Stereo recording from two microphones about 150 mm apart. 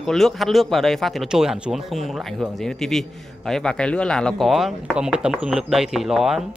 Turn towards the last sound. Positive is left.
turn(degrees=0)  # may be behind; listen again after turning